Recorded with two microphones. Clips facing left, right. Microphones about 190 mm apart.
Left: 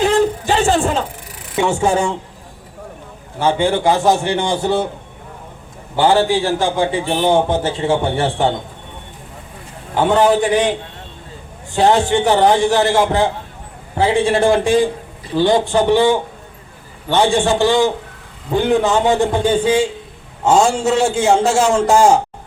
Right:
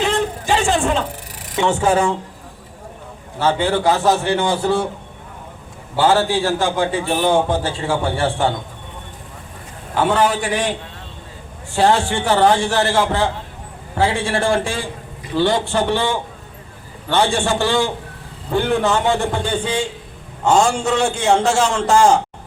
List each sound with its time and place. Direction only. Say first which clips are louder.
0.0 s a sound: left 5 dB; 40° left (ahead or behind)
1.5 s a man's voice: left 1 dB; 10° left (ahead or behind)
3.3 s a man's voice: left 2 dB; 15° left (ahead or behind)
6.0 s a man's voice: left 2 dB; 15° left (ahead or behind)
9.9 s a man's voice: left 4 dB; 20° left (ahead or behind)
11.7 s a man's voice: left 3 dB; 20° left (ahead or behind)
20.5 s a man's voice: left 2 dB; 25° left (ahead or behind)
21.3 s a man's voice: left 3 dB; 5° left (ahead or behind)